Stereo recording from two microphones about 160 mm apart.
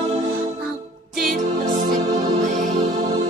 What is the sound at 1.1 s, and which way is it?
Music, 60° right (ahead or behind).